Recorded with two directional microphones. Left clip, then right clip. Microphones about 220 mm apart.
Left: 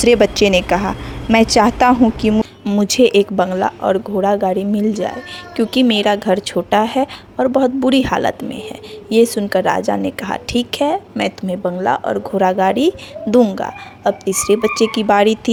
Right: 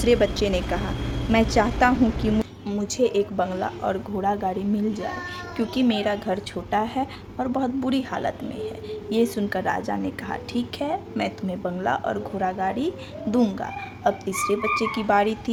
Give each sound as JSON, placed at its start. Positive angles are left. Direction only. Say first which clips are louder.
{"t": 0.0, "sound": "a woman's voice", "louder": "left 9 dB", "side_deg": 35}